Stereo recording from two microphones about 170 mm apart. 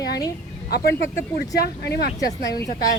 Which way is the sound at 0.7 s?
70° left (ahead or behind).